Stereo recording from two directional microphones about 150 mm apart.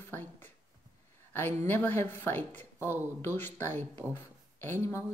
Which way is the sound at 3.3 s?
15° left (ahead or behind).